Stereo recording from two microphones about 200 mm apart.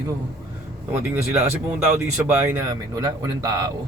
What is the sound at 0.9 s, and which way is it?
Speech, 10° right (ahead or behind).